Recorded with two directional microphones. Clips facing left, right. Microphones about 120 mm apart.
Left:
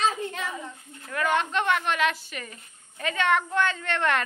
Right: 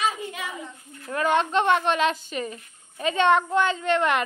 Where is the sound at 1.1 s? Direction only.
25° right (ahead or behind).